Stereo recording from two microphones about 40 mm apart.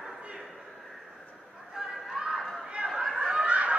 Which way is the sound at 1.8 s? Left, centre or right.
Centre.